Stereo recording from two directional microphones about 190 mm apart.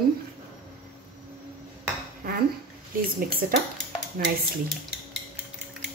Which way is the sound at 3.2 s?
50° right (ahead or behind).